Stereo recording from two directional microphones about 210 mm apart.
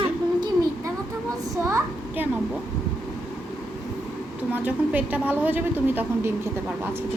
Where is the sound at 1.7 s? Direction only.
15° right (ahead or behind).